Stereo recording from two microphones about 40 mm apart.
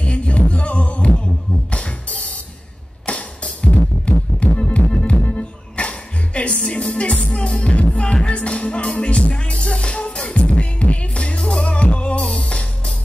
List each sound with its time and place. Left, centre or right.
0.0 s music: left